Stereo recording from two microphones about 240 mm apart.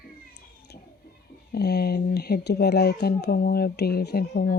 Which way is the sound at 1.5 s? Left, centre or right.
Left.